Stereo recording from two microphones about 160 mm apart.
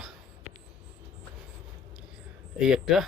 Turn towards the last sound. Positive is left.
turn(degrees=-5)  # may be behind; listen again after turning